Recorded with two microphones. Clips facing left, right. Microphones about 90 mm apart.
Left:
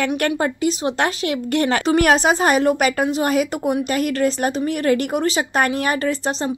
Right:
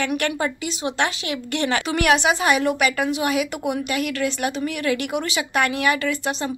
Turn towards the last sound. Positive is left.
turn(degrees=35)  # may be behind; listen again after turning